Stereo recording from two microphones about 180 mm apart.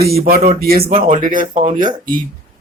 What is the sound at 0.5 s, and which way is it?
Speech, 55° right (ahead or behind).